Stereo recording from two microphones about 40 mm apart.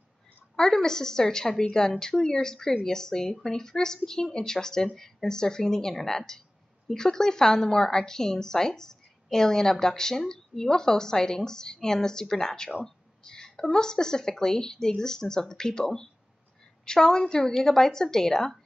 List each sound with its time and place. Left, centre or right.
0.6 s a woman's voice: centre